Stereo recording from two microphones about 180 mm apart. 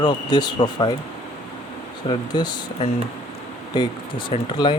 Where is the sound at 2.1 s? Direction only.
25° left (ahead or behind).